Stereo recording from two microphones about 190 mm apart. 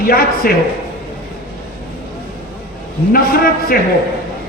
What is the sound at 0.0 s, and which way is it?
Speech, 50° left (ahead or behind).